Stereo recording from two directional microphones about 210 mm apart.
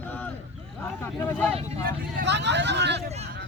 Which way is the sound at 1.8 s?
50° right (ahead or behind).